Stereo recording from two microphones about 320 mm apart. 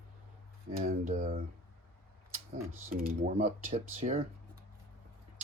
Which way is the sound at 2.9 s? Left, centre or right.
Right.